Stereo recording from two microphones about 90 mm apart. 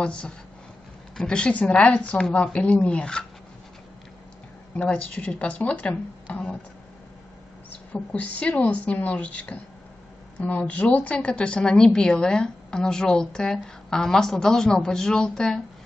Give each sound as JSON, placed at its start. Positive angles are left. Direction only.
{"t": 0.0, "sound": "a woman's voice", "side_deg": 10}
{"t": 4.7, "sound": "a woman's voice", "side_deg": 15}
{"t": 7.7, "sound": "a woman's voice", "side_deg": 15}